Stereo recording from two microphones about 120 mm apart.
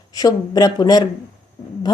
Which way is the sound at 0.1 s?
35° left (ahead or behind).